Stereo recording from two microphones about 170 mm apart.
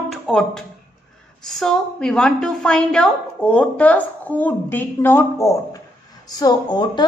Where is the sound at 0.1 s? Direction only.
5° left (ahead or behind).